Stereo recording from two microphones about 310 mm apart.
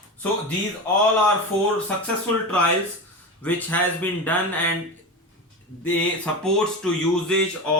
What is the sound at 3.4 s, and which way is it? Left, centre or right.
Speech, centre.